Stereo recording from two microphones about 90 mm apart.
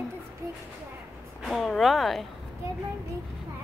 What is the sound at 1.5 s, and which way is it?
Speech, centre (ahead or behind).